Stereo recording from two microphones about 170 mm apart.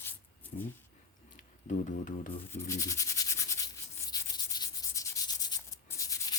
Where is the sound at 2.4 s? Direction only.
15° left (ahead or behind).